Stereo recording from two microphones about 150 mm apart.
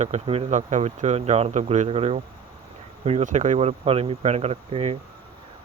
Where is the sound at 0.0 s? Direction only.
45° right (ahead or behind).